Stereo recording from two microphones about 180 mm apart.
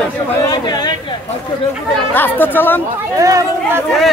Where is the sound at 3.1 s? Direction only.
20° right (ahead or behind).